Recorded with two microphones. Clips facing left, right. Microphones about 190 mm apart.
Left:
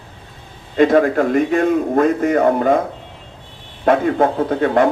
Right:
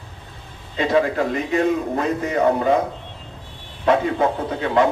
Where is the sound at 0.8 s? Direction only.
50° left (ahead or behind).